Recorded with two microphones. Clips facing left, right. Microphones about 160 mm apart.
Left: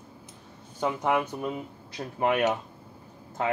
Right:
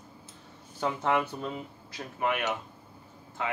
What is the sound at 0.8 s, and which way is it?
Speech, 15° left (ahead or behind).